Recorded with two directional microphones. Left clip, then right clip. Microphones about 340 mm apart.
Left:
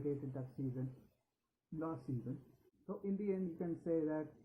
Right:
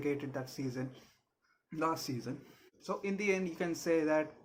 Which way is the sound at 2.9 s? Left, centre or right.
Centre.